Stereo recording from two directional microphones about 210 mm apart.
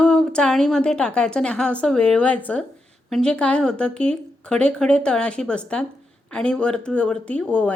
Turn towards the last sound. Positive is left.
turn(degrees=5)  # may be behind; listen again after turning